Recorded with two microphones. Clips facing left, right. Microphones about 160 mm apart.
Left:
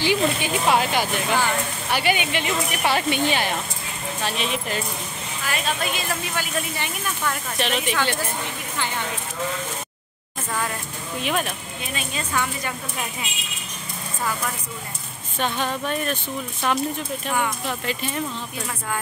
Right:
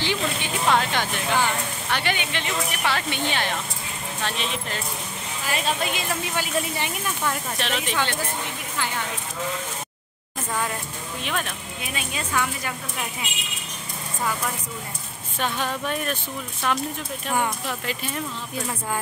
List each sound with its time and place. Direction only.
0.0 s speech: 10° left (ahead or behind)
5.5 s speech: 25° right (ahead or behind)
7.5 s speech: 5° left (ahead or behind)
11.2 s speech: 10° left (ahead or behind)
11.8 s speech: 5° right (ahead or behind)
15.3 s speech: 5° right (ahead or behind)